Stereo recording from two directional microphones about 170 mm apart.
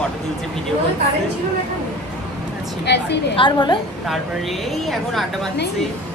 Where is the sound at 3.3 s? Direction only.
30° left (ahead or behind).